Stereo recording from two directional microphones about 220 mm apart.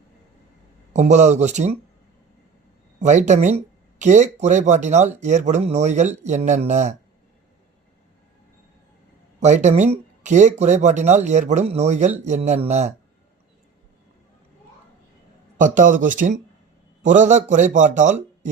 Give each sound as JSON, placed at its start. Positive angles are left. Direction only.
{"t": 0.9, "sound": "speech", "side_deg": -30}
{"t": 3.0, "sound": "speech", "side_deg": -30}
{"t": 9.4, "sound": "speech", "side_deg": -30}
{"t": 15.5, "sound": "speech", "side_deg": -35}